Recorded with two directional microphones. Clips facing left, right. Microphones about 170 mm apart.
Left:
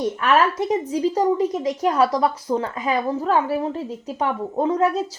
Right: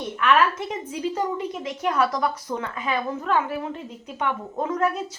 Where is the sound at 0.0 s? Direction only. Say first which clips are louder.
Left 2 dB; 40° left (ahead or behind).